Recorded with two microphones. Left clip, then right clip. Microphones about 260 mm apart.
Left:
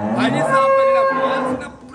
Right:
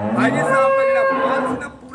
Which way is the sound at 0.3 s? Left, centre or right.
Left.